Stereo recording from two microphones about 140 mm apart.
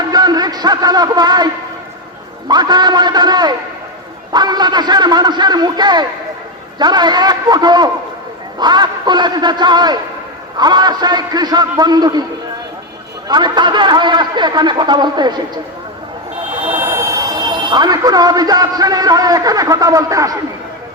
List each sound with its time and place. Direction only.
0.1 s music: 30° right (ahead or behind)
2.5 s a man's voice: 30° right (ahead or behind)
13.2 s speech: 30° right (ahead or behind)
16.7 s a man's voice: 20° right (ahead or behind)